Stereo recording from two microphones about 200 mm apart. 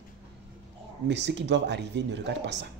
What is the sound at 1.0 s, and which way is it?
A man's voice, 60° right (ahead or behind).